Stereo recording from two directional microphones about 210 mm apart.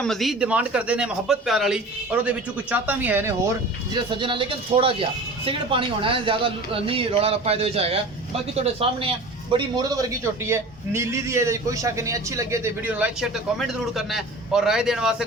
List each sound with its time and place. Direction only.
0.0 s a man's voice: centre (ahead or behind)
3.9 s a man's voice: 25° right (ahead or behind); by 15.1 s centre (ahead or behind)